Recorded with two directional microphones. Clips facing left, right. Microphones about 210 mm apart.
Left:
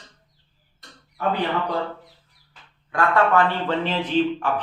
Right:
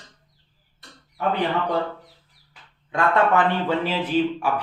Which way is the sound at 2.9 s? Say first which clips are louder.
Even; 20° right (ahead or behind).